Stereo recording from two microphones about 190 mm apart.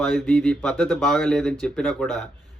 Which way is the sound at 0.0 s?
5° left (ahead or behind).